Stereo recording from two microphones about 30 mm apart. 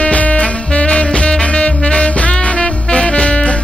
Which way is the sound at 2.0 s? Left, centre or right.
Left.